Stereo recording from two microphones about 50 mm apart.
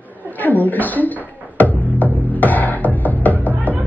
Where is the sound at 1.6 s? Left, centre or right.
Left.